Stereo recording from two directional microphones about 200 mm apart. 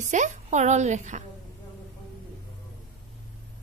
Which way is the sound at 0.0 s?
35° right (ahead or behind).